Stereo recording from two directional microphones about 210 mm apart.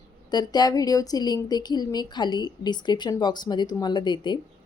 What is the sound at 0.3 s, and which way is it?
Speech, 20° left (ahead or behind).